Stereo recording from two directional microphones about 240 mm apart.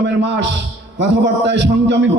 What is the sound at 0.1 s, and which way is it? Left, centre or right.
A man's voice, right.